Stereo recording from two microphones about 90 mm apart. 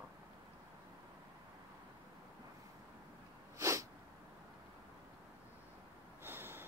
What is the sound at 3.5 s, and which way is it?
Sneeze, 35° right (ahead or behind).